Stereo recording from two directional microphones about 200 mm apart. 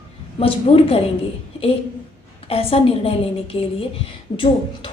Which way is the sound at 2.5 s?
30° left (ahead or behind).